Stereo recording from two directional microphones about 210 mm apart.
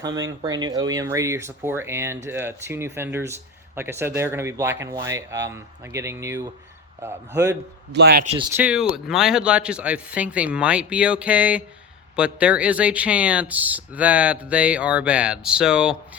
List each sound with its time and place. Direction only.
0.0 s speech: 20° right (ahead or behind)
7.9 s speech: 50° right (ahead or behind)
8.2 s speech: 30° right (ahead or behind)
8.5 s speech: 5° right (ahead or behind)